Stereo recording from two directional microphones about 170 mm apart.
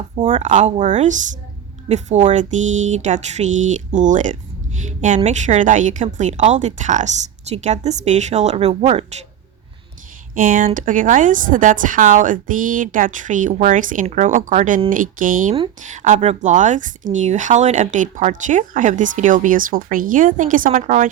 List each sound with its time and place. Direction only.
0.3 s a woman's voice: 45° right (ahead or behind)
10.3 s speech: 55° right (ahead or behind)